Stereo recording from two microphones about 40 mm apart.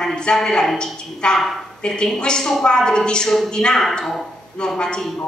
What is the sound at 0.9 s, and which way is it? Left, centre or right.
A man's voice, left.